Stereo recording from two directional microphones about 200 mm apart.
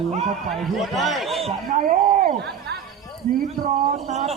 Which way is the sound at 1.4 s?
40° right (ahead or behind).